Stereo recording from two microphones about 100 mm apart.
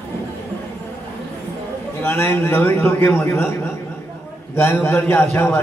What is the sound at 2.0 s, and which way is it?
A man's voice, 25° left (ahead or behind).